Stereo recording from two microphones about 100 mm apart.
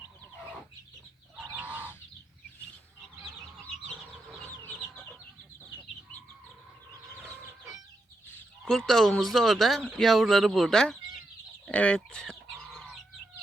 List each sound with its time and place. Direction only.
1.5 s goose: 15° right (ahead or behind)
8.9 s speech: 5° left (ahead or behind)
11.6 s chicken: 15° left (ahead or behind)